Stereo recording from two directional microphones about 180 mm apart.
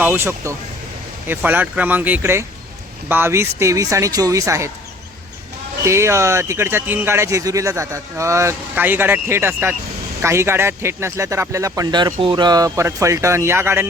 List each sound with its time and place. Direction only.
0.0 s speech: 10° right (ahead or behind)
5.8 s speech: 15° right (ahead or behind)